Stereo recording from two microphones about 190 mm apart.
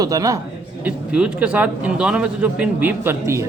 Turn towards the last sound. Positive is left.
turn(degrees=-15)  # may be behind; listen again after turning